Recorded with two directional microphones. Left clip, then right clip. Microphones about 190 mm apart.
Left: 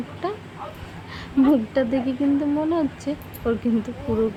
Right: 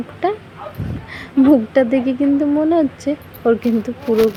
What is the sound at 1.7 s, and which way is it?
Speech, 25° right (ahead or behind).